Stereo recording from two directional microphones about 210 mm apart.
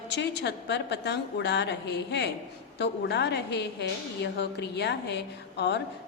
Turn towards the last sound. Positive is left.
turn(degrees=55)  # may be behind; listen again after turning